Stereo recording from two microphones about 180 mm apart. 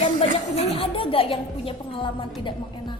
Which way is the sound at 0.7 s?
30° left (ahead or behind).